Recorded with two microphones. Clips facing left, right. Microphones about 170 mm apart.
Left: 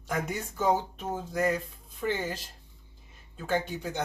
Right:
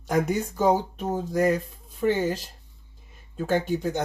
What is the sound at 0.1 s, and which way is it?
Speech, 35° right (ahead or behind).